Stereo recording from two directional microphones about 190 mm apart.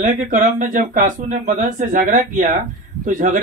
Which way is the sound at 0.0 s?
45° right (ahead or behind).